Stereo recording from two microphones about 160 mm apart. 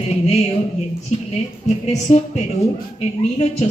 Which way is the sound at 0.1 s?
40° left (ahead or behind).